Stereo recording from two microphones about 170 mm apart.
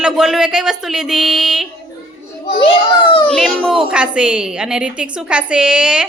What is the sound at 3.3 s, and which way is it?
A woman's voice, centre (ahead or behind).